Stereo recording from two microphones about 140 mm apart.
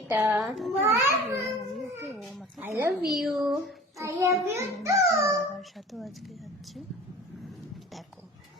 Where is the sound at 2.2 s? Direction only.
Centre (ahead or behind).